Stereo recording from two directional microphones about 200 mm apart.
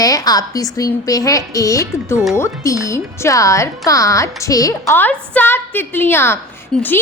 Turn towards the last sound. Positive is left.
turn(degrees=10)  # may be behind; listen again after turning